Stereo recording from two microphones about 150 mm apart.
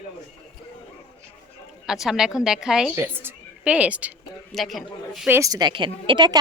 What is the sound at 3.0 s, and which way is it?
A woman's voice, 15° right (ahead or behind).